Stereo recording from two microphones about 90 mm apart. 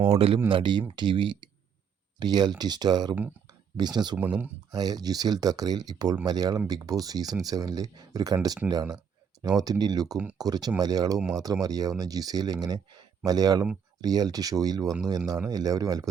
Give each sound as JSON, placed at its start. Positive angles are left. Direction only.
{"t": 0.1, "sound": "speech", "side_deg": -90}
{"t": 0.4, "sound": "speech", "side_deg": -65}
{"t": 4.2, "sound": "speech", "side_deg": -20}
{"t": 4.7, "sound": "speech", "side_deg": -45}